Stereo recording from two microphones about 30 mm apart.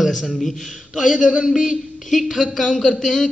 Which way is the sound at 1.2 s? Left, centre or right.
Right.